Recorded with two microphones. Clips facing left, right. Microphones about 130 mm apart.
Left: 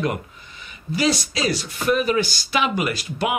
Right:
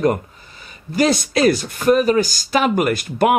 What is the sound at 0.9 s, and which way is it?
Speech, 50° right (ahead or behind).